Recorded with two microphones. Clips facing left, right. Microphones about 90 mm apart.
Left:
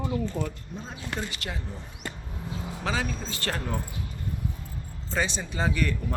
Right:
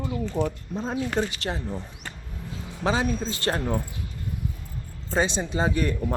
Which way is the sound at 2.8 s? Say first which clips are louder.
Right 6 dB; 30° right (ahead or behind).